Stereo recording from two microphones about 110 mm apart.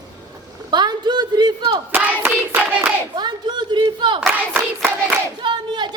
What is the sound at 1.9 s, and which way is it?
Hands, 15° right (ahead or behind).